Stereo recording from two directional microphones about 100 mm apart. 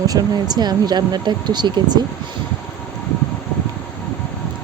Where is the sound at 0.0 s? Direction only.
40° right (ahead or behind).